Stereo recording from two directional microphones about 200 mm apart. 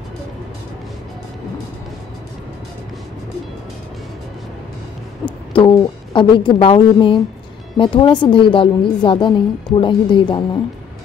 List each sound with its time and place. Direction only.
5.5 s a woman's voice: 25° left (ahead or behind)